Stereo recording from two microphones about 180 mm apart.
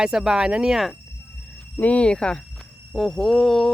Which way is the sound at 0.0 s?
5° right (ahead or behind).